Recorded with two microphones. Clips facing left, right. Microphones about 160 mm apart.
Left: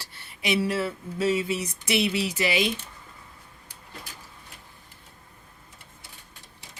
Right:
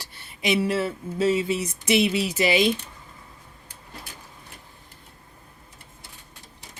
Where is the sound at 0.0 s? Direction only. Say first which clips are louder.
Right 4 dB; 20° right (ahead or behind).